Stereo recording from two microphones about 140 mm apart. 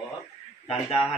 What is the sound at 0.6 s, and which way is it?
Speech, 40° left (ahead or behind).